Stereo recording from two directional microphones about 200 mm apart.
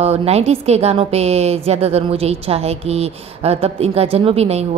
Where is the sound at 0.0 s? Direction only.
30° right (ahead or behind).